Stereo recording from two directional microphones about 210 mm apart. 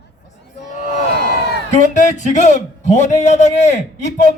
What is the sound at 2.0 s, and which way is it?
A man's voice, 35° left (ahead or behind).